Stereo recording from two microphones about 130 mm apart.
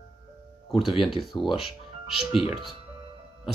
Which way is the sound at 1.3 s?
35° left (ahead or behind).